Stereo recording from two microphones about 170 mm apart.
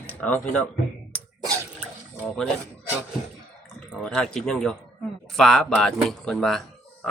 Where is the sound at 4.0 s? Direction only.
5° left (ahead or behind).